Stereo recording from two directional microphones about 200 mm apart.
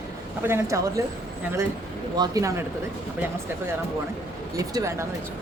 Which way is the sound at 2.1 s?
20° right (ahead or behind).